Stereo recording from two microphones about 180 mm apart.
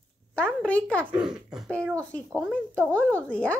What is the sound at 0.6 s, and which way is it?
A child's voice, 5° left (ahead or behind).